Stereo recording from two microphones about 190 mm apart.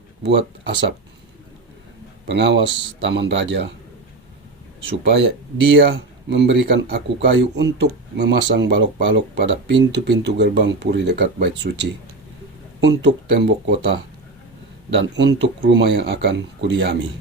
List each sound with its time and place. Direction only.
0.2 s speech: 65° right (ahead or behind)
2.2 s speech: 65° right (ahead or behind)
5.7 s speech: 65° right (ahead or behind)
14.8 s speech: 65° right (ahead or behind)